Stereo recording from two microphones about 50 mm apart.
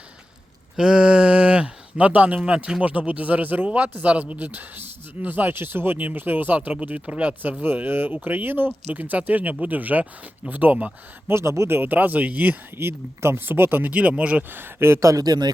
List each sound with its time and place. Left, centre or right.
0.8 s speech: centre
7.6 s speech: right
11.3 s speech: right
11.8 s speech: right
12.7 s speech: right
13.9 s speech: right
14.5 s speech: right